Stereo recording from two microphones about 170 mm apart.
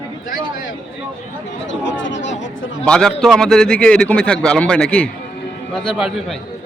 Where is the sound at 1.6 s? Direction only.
90° left.